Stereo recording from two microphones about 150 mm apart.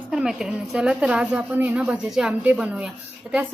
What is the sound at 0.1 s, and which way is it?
A woman's voice, 5° right (ahead or behind).